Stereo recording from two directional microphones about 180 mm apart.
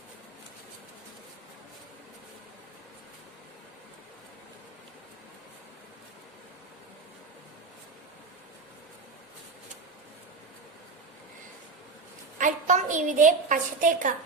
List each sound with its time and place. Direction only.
12.4 s a woman's voice: 45° right (ahead or behind)